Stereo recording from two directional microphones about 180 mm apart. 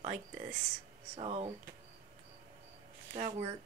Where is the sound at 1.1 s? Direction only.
35° right (ahead or behind).